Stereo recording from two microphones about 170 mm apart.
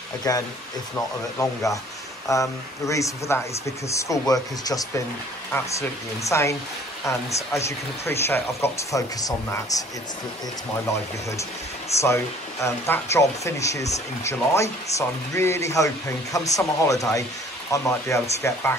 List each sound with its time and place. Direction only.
0.3 s speech: 20° left (ahead or behind)
12.0 s speech: 15° left (ahead or behind)